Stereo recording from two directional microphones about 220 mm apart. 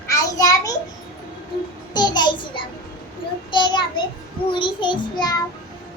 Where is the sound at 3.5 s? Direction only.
20° left (ahead or behind).